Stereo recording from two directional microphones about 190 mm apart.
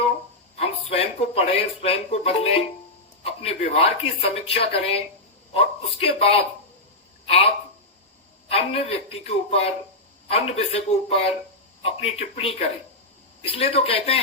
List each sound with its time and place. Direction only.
0.6 s a woman's voice: 35° left (ahead or behind)